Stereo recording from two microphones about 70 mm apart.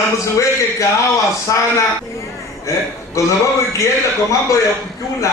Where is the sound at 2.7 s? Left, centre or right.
Left.